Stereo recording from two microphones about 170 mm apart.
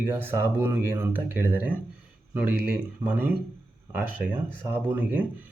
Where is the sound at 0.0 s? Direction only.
15° right (ahead or behind).